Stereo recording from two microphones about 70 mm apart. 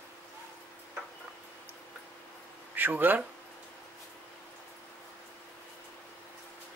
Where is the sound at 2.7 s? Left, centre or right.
Right.